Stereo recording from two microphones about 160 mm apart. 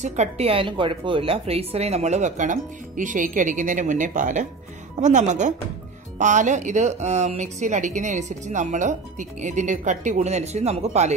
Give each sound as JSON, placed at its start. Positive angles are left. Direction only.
{"t": 0.0, "sound": "speech", "side_deg": -45}